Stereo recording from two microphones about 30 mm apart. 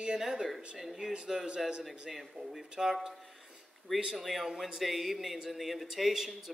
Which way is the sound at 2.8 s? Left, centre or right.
Centre.